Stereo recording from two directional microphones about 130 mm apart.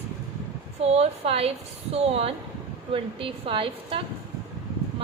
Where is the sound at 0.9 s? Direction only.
50° right (ahead or behind).